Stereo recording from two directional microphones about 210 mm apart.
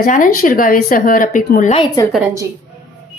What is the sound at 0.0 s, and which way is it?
Speech, 40° left (ahead or behind).